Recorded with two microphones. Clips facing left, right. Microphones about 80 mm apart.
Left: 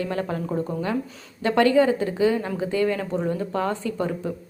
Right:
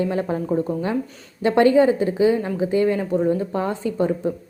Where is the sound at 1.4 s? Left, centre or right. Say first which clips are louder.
Right 3 dB; centre.